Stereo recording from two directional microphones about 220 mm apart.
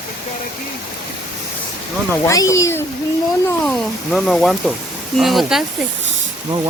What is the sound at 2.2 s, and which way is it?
Speech, 15° left (ahead or behind).